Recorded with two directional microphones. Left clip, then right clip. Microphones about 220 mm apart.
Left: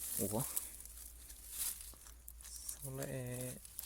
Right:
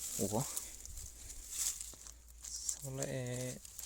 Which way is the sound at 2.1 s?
10° right (ahead or behind).